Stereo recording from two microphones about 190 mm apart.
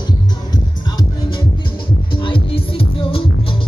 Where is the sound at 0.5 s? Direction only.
25° left (ahead or behind).